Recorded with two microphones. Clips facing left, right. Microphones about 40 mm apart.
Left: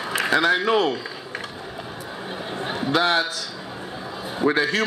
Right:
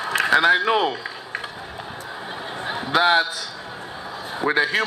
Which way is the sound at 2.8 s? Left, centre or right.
Right.